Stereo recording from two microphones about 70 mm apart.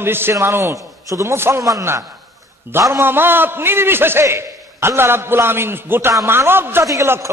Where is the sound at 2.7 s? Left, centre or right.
Right.